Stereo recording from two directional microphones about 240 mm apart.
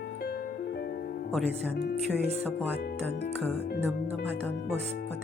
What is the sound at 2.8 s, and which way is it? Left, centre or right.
Speech, left.